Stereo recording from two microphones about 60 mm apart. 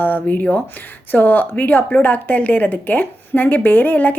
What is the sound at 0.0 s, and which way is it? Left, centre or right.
Speech, left.